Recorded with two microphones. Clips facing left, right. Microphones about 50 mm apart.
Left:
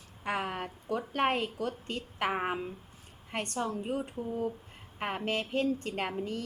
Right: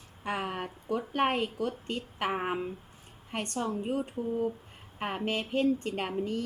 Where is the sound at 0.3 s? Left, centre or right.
Centre.